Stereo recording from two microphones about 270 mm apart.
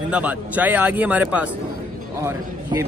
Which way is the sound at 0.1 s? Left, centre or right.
Centre.